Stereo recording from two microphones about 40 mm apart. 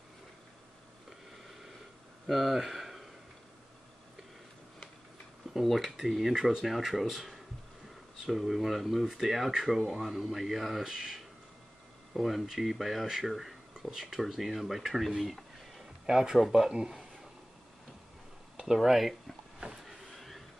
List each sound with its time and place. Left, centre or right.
2.2 s speech: centre
5.5 s speech: centre
16.7 s a sound: centre
18.8 s speech: centre
19.8 s vehicle: centre